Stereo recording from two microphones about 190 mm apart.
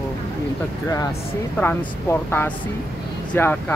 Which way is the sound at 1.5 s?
10° left (ahead or behind).